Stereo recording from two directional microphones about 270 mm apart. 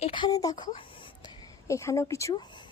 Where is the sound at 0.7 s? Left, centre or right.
Centre.